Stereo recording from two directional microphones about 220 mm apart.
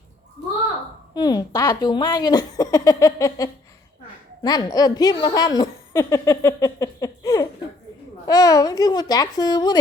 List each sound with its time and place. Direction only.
1.1 s speech: 20° left (ahead or behind)